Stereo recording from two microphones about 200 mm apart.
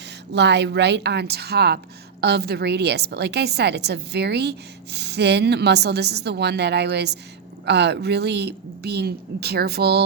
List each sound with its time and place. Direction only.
0.3 s a woman's voice: 60° right (ahead or behind)